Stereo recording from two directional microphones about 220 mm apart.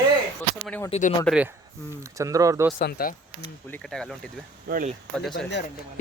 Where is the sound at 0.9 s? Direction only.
30° left (ahead or behind).